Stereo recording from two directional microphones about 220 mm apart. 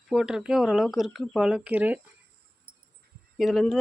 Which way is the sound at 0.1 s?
5° right (ahead or behind).